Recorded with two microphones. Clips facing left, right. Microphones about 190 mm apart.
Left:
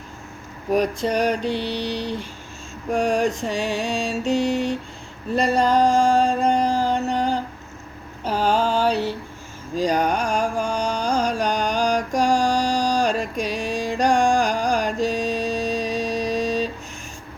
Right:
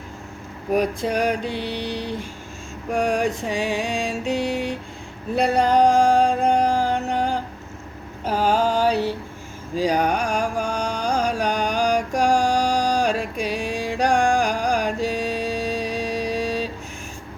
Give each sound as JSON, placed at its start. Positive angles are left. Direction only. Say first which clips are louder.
{"t": 0.7, "sound": "speech", "louder": "left 1 dB", "side_deg": -5}
{"t": 1.5, "sound": "mantra", "louder": "left 2 dB", "side_deg": -50}
{"t": 2.9, "sound": "music", "louder": "left 1 dB", "side_deg": -10}
{"t": 5.7, "sound": "music", "louder": "right 2 dB", "side_deg": -10}
{"t": 8.3, "sound": "a sound", "louder": "even", "side_deg": -10}
{"t": 9.7, "sound": "music", "louder": "even", "side_deg": -10}